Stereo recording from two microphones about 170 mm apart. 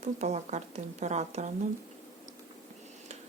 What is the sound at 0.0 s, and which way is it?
Speech, 40° right (ahead or behind).